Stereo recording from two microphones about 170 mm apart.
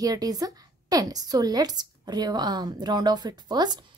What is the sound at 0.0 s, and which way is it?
A woman's voice, 20° right (ahead or behind).